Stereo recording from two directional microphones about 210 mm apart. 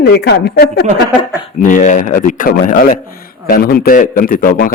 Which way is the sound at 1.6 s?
40° left (ahead or behind).